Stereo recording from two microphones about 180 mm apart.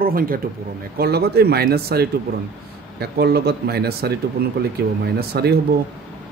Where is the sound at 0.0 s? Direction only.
55° right (ahead or behind).